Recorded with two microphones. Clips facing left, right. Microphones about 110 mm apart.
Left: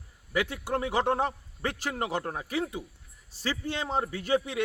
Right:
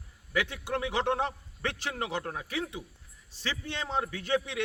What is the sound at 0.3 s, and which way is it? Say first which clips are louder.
A man's voice: left 2 dB; 40° left (ahead or behind).